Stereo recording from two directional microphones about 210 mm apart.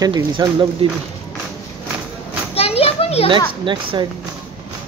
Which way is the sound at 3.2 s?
25° right (ahead or behind).